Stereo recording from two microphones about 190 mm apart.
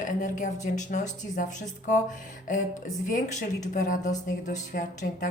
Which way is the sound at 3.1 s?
40° left (ahead or behind).